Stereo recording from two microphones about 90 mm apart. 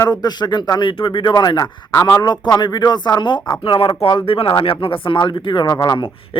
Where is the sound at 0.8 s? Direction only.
65° left (ahead or behind).